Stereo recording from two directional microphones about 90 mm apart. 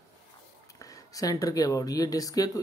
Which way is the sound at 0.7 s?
40° left (ahead or behind).